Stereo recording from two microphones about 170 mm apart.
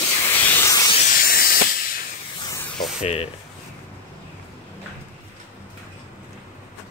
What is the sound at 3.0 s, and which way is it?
Speech, 35° left (ahead or behind).